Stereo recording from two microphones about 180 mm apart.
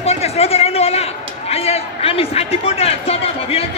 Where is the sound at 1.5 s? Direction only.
35° left (ahead or behind).